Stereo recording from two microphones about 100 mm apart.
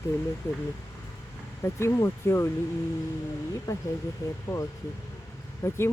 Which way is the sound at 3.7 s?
30° left (ahead or behind).